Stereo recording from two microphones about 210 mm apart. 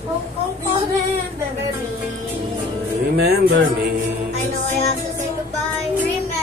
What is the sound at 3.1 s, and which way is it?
Music, 50° right (ahead or behind).